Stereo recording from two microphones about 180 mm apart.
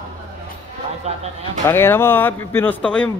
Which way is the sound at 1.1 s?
40° right (ahead or behind).